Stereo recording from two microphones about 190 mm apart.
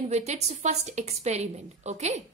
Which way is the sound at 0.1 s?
35° right (ahead or behind).